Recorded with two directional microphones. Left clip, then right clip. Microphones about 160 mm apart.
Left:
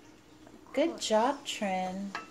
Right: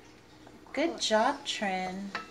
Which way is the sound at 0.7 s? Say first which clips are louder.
Even; 50° left (ahead or behind).